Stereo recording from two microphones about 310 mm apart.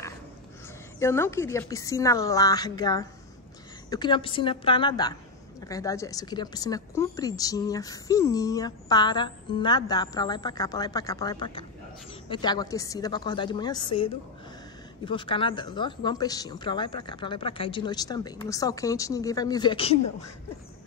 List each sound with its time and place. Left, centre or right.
0.9 s a woman's voice: centre